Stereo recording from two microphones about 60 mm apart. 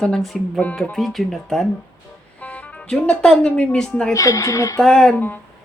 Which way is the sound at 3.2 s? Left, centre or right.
Centre.